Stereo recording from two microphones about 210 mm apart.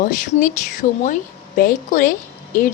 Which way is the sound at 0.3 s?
35° left (ahead or behind).